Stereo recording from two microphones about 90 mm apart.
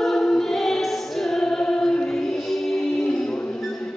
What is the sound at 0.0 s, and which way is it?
Music, 5° left (ahead or behind).